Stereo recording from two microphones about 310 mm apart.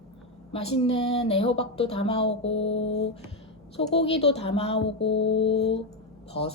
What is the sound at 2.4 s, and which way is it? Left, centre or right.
Music, left.